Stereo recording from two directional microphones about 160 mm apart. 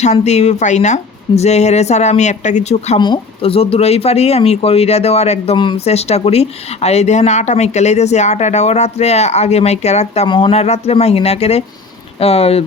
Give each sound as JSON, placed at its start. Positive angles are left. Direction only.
{"t": 0.0, "sound": "speech", "side_deg": 45}
{"t": 3.0, "sound": "speech", "side_deg": 30}
{"t": 10.2, "sound": "speech", "side_deg": 30}